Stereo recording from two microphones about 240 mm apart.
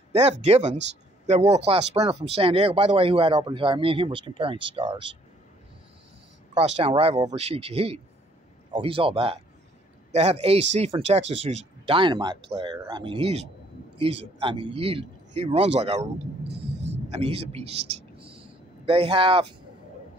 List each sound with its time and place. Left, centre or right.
0.1 s speech: right
6.5 s speech: right
16.4 s rumble: right
17.1 s speech: right